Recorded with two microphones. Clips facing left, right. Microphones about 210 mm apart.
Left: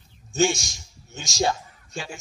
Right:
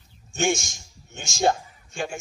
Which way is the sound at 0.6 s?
55° right (ahead or behind).